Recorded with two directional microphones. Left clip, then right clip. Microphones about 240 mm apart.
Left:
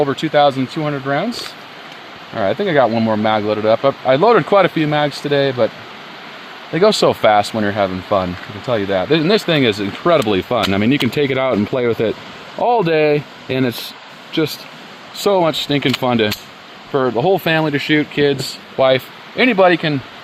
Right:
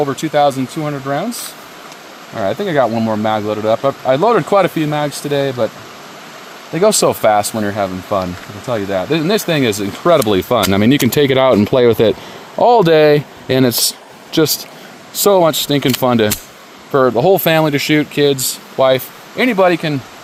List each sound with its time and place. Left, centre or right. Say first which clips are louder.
0.0 s speech: even; centre
6.7 s speech: even; centre; by 13.7 s right
15.2 s speech: right 4 dB; right
18.8 s speech: right 1 dB; right